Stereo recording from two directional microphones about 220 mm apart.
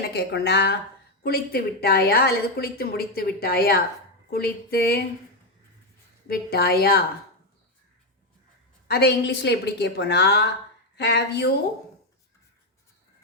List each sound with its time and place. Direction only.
0.0 s a woman's voice: 45° left (ahead or behind)
6.2 s a woman's voice: 45° left (ahead or behind)
8.9 s a woman's voice: 50° left (ahead or behind)